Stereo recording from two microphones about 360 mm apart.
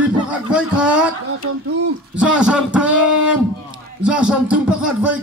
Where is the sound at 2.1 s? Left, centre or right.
Centre.